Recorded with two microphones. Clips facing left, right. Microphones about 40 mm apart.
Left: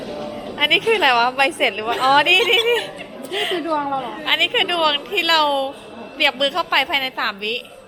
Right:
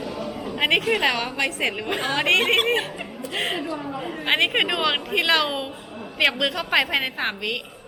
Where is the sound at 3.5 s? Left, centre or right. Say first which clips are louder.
Left 7 dB; left.